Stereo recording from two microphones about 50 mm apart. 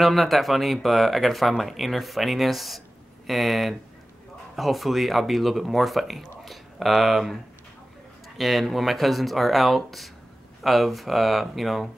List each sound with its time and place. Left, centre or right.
0.0 s speech: centre
8.4 s speech: centre